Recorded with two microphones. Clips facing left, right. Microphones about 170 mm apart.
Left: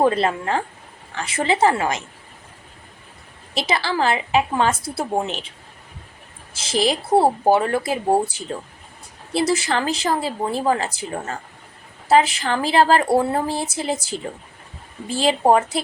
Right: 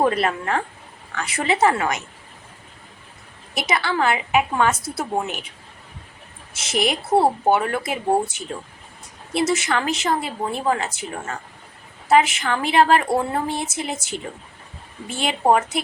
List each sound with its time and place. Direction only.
0.0 s a woman's voice: 25° left (ahead or behind)
3.5 s a woman's voice: 30° left (ahead or behind)
6.5 s a woman's voice: 30° left (ahead or behind)